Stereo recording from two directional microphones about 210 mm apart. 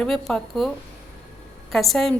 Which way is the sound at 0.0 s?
Centre (ahead or behind).